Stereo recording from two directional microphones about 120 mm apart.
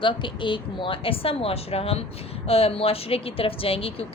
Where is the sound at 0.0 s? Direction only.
45° left (ahead or behind).